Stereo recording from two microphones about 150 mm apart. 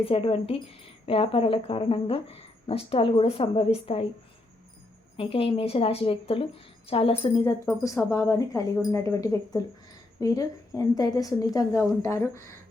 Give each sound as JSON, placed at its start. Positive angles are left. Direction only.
{"t": 0.0, "sound": "speech", "side_deg": 40}
{"t": 5.1, "sound": "speech", "side_deg": 40}
{"t": 7.4, "sound": "a woman's voice", "side_deg": 20}